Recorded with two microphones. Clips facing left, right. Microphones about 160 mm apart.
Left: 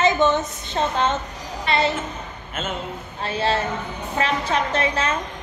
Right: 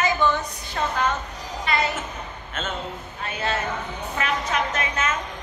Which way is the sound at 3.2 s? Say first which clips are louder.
Left 4 dB; 30° left (ahead or behind).